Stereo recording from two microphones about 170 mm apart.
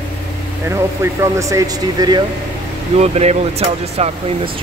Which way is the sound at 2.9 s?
40° right (ahead or behind).